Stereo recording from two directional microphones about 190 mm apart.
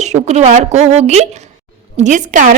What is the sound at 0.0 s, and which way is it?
A woman's voice, 35° right (ahead or behind).